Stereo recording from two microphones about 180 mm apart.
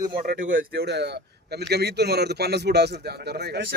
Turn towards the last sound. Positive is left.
turn(degrees=-65)  # may be behind; listen again after turning